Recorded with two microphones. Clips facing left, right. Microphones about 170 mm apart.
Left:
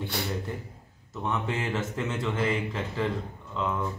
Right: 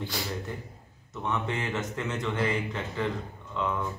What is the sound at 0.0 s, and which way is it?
Speech, 60° left (ahead or behind).